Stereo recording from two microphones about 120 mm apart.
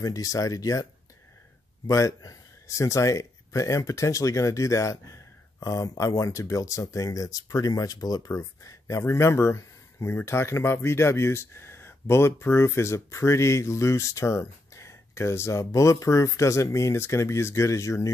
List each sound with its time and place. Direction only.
0.0 s speech: 30° left (ahead or behind)
1.9 s speech: 25° left (ahead or behind)